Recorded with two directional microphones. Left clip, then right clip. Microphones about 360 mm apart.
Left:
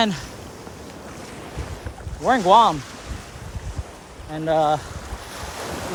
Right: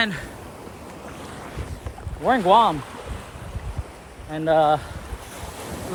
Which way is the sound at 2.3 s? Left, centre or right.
Centre.